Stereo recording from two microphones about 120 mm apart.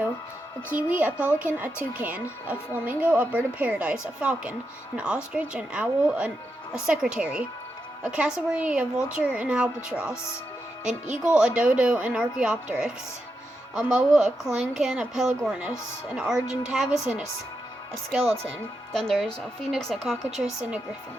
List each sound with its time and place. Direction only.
0.7 s a woman's voice: 10° right (ahead or behind)
18.9 s a woman's voice: 5° left (ahead or behind)
20.4 s a woman's voice: 10° right (ahead or behind)